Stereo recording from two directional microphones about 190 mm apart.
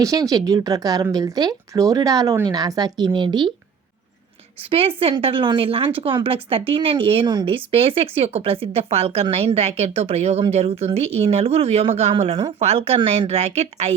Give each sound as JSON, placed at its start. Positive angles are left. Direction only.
{"t": 0.0, "sound": "speech", "side_deg": -20}
{"t": 4.7, "sound": "speech", "side_deg": -30}